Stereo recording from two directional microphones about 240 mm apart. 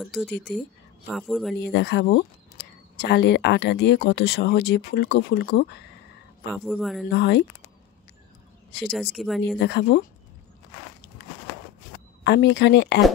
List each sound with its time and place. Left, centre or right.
0.0 s speech: centre
1.6 s speech: left
6.5 s speech: centre
7.1 s speech: left
9.1 s speech: centre
9.6 s speech: left
12.2 s speech: left